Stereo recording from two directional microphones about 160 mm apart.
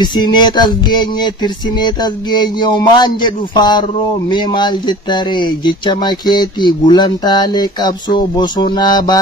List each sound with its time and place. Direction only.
0.0 s speech: 25° left (ahead or behind)